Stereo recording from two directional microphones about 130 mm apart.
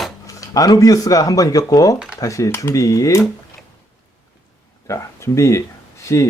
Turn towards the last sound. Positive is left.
turn(degrees=20)  # may be behind; listen again after turning